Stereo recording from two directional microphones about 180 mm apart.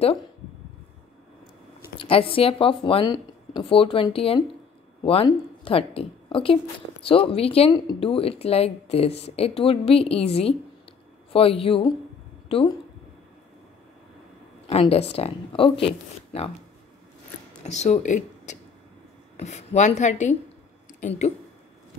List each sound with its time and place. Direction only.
2.0 s a woman's voice: 30° left (ahead or behind)
14.7 s speech: 35° left (ahead or behind)
17.6 s speech: 40° left (ahead or behind)